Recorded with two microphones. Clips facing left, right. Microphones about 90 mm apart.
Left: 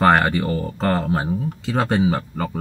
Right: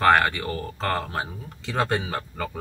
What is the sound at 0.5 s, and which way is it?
Speech, 20° left (ahead or behind).